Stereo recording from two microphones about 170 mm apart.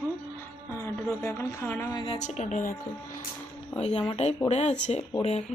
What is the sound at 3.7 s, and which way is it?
Speech, 40° left (ahead or behind).